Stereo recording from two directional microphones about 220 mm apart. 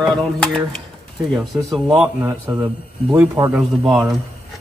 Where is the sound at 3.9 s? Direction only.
Centre (ahead or behind).